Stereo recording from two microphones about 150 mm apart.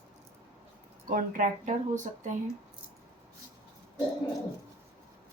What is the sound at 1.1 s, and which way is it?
Speech, 60° right (ahead or behind).